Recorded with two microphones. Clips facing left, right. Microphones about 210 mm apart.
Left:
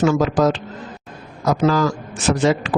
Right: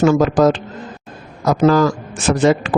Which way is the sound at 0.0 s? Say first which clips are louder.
Right 4 dB; 50° right (ahead or behind).